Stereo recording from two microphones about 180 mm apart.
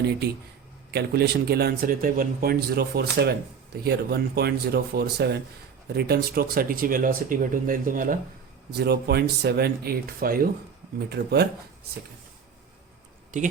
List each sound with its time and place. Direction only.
0.9 s a man's voice: 65° right (ahead or behind)
8.8 s a man's voice: 60° right (ahead or behind)
11.1 s a man's voice: 65° right (ahead or behind)
13.3 s speech: 45° right (ahead or behind)